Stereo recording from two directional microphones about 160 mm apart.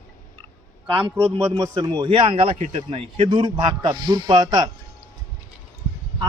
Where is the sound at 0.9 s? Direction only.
25° right (ahead or behind).